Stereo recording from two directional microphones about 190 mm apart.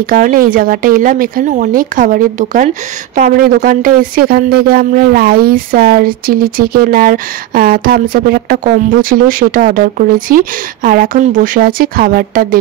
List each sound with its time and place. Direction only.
0.1 s speech: 50° right (ahead or behind)